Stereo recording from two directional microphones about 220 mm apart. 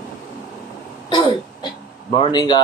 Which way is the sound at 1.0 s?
20° left (ahead or behind).